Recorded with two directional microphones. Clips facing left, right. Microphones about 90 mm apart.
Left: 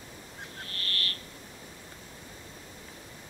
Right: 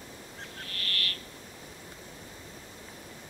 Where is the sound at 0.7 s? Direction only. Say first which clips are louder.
Even; 30° left (ahead or behind).